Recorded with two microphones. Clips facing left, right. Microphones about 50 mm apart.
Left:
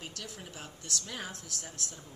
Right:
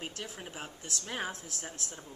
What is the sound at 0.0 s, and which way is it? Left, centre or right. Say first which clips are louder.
A woman's voice: right 3 dB; right.